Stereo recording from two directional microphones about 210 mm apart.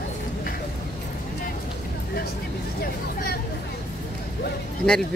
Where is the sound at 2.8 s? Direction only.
45° left (ahead or behind).